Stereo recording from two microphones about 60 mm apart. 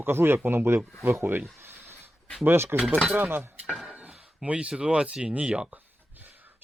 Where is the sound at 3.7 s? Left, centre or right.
Centre.